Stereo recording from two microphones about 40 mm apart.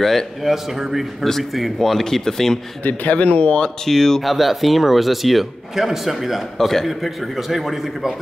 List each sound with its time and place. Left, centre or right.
0.0 s a man's voice: centre
1.8 s speech: centre
2.8 s speech: left
3.6 s speech: centre
4.2 s a man's voice: centre